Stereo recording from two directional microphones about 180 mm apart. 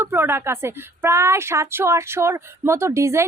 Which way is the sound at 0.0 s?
10° right (ahead or behind).